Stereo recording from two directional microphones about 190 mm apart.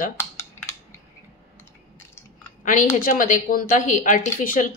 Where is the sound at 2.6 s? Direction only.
45° left (ahead or behind).